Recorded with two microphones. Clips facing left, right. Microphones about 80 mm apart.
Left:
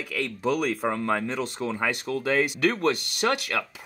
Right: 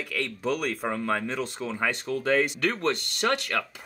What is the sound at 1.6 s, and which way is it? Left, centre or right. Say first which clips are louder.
Speech: left 2 dB; left.